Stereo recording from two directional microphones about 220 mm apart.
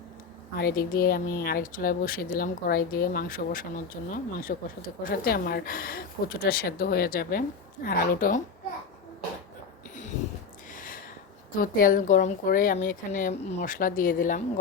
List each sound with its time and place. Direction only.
0.5 s a woman's voice: 45° left (ahead or behind)
9.9 s a sound: 35° left (ahead or behind)
11.5 s a woman's voice: 40° left (ahead or behind)